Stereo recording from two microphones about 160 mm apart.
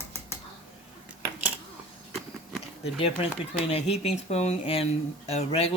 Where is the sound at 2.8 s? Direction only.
40° left (ahead or behind).